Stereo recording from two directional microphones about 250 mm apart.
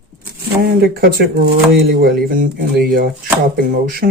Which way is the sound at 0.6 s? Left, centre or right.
Right.